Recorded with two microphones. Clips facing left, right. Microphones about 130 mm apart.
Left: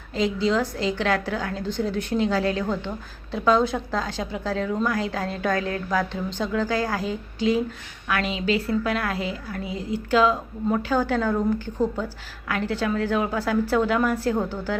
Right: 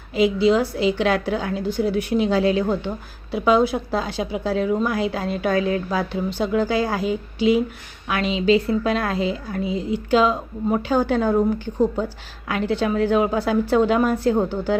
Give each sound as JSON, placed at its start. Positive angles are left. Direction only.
{"t": 0.1, "sound": "a woman's voice", "side_deg": -15}